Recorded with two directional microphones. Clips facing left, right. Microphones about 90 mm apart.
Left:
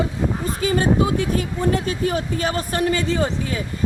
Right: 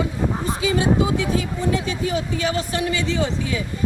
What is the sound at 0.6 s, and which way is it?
Speech, 50° left (ahead or behind).